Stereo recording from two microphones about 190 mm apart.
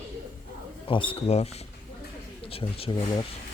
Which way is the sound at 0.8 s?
25° left (ahead or behind).